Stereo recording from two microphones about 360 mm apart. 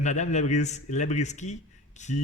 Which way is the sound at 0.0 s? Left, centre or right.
Centre.